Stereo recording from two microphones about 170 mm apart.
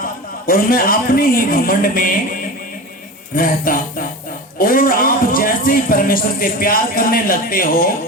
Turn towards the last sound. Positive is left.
turn(degrees=55)  # may be behind; listen again after turning